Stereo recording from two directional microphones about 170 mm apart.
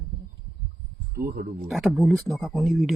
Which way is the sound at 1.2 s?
65° right (ahead or behind).